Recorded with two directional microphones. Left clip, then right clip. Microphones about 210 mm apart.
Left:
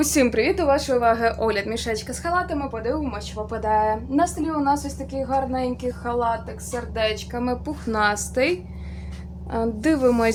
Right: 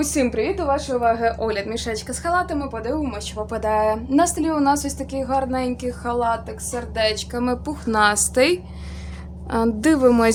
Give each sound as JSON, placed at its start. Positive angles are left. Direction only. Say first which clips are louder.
{"t": 0.0, "sound": "a woman's voice", "louder": "left 2 dB", "side_deg": 10}